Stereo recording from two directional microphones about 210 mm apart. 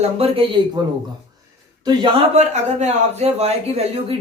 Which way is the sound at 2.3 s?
35° right (ahead or behind).